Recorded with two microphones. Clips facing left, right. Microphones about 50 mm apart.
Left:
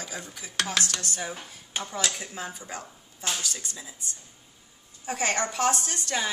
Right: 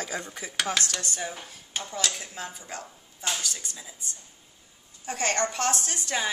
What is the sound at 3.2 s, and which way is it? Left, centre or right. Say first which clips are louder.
Speech: even; centre.